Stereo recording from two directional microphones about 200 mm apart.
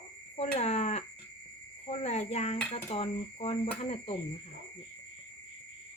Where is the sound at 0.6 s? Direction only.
35° left (ahead or behind).